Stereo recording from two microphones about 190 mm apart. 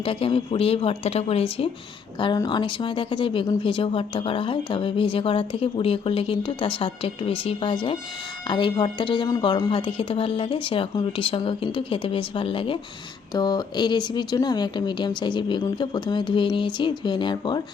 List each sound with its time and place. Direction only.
0.0 s speech: 30° left (ahead or behind)